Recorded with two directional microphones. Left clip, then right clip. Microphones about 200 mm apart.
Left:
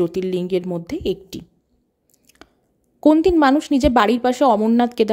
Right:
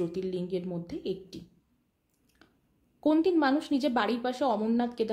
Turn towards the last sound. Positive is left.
turn(degrees=45)  # may be behind; listen again after turning